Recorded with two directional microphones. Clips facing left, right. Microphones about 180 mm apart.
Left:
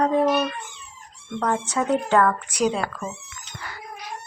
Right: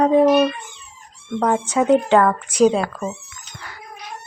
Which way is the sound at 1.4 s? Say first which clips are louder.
Right 5 dB; 15° right (ahead or behind).